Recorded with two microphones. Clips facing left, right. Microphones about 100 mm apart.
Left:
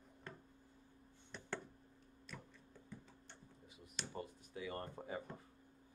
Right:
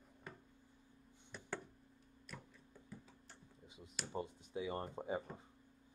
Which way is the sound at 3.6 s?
20° right (ahead or behind).